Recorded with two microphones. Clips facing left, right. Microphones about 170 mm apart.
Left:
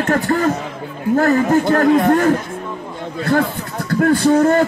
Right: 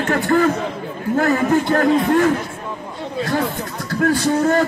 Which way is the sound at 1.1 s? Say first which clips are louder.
Left 2 dB; 45° left (ahead or behind).